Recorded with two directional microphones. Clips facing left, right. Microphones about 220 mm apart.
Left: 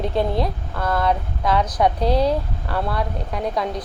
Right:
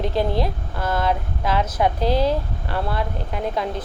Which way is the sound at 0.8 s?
25° right (ahead or behind).